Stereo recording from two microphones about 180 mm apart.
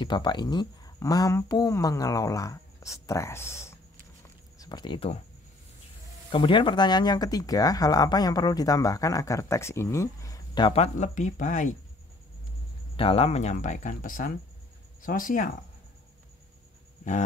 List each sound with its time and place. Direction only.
0.0 s speech: 25° left (ahead or behind)
6.3 s speech: 30° left (ahead or behind); by 11.7 s 45° left (ahead or behind)
12.9 s speech: 30° left (ahead or behind); by 15.5 s 50° left (ahead or behind)